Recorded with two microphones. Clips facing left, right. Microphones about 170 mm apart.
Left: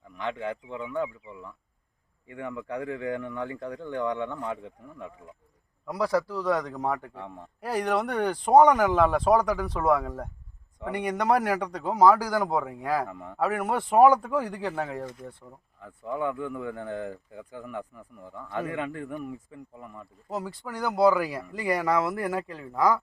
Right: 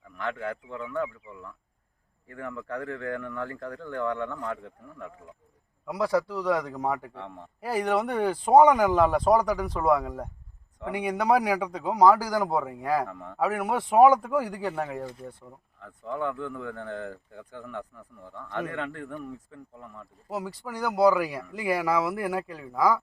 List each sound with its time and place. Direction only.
0.2 s speech: 15° left (ahead or behind)
2.3 s speech: 20° left (ahead or behind)
5.8 s a man's voice: 5° right (ahead or behind)
7.1 s speech: 10° left (ahead or behind)
7.6 s a man's voice: 5° right (ahead or behind)
15.8 s speech: 10° left (ahead or behind)
20.3 s a man's voice: 5° right (ahead or behind)